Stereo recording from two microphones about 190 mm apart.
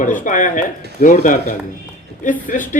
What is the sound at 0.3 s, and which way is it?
A man's voice, 45° left (ahead or behind).